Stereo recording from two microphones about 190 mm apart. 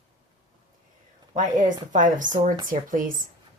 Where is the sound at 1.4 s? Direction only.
45° right (ahead or behind).